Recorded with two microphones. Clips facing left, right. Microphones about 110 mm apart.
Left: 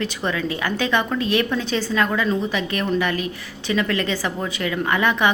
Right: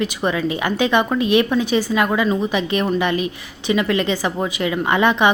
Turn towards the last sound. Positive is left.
turn(degrees=-20)  # may be behind; listen again after turning